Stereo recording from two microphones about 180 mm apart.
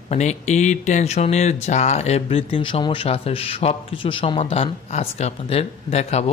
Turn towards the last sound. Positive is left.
turn(degrees=35)  # may be behind; listen again after turning